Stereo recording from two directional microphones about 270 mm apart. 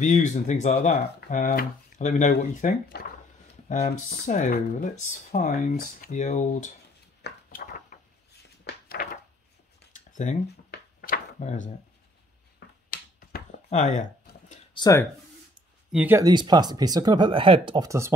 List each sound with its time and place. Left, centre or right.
0.0 s speech: left
7.2 s a sound: left
14.8 s speech: centre
15.9 s speech: centre